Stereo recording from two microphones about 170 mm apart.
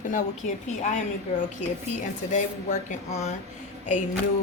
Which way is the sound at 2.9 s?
40° left (ahead or behind).